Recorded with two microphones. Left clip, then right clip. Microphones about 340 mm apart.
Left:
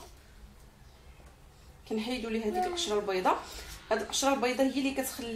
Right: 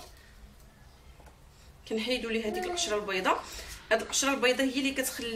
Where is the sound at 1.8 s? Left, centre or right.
Centre.